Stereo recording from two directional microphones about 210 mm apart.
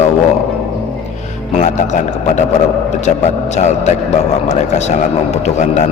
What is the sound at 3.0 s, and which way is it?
Speech, 35° left (ahead or behind).